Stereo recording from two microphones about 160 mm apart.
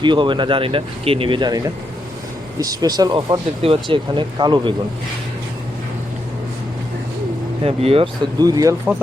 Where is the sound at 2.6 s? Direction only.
25° right (ahead or behind).